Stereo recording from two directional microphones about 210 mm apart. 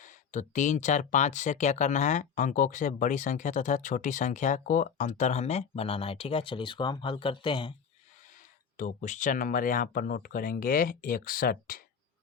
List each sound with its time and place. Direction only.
0.0 s speech: 35° left (ahead or behind)
8.8 s speech: 40° left (ahead or behind)